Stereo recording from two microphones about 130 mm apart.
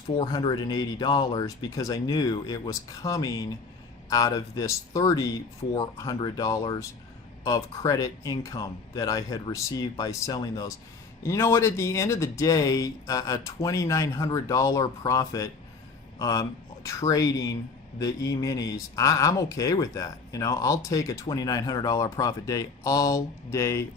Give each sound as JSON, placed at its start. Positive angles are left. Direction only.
{"t": 0.2, "sound": "speech", "side_deg": 35}